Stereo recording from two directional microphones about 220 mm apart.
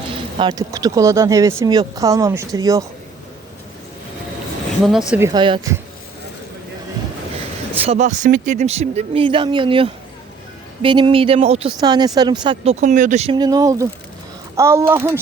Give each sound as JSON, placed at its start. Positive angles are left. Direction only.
{"t": 0.3, "sound": "speech", "side_deg": -20}
{"t": 4.8, "sound": "speech", "side_deg": 0}
{"t": 5.3, "sound": "speech", "side_deg": -20}
{"t": 7.8, "sound": "speech", "side_deg": -30}
{"t": 12.8, "sound": "speech", "side_deg": -35}